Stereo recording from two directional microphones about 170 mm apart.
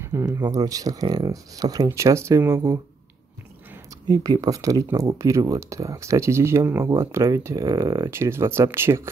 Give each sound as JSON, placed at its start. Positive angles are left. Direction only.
{"t": 0.0, "sound": "speech", "side_deg": -15}
{"t": 4.1, "sound": "speech", "side_deg": -20}